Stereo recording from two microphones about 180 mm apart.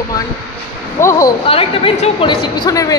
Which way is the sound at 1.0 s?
15° left (ahead or behind).